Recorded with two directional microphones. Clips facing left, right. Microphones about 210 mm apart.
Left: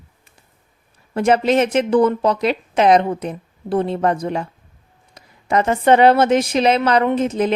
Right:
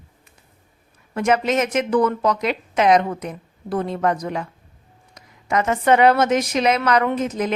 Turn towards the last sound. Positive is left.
turn(degrees=30)  # may be behind; listen again after turning